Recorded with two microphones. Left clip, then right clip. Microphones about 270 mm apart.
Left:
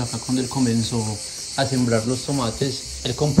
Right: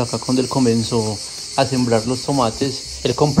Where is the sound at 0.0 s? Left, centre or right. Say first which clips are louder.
Right 6 dB; right.